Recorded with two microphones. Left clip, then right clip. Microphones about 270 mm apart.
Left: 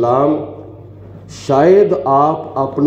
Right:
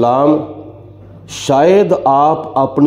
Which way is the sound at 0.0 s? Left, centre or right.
Right.